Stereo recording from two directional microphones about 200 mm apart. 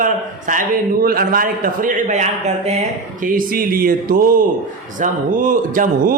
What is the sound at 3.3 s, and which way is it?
Speech, 45° right (ahead or behind).